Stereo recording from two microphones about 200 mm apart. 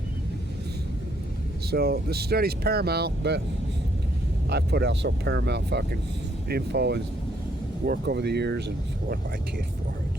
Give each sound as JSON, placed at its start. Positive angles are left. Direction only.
{"t": 1.7, "sound": "speech", "side_deg": -50}
{"t": 4.4, "sound": "speech", "side_deg": -55}